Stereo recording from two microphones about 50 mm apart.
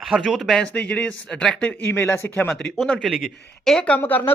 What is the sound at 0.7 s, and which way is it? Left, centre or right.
Speech, left.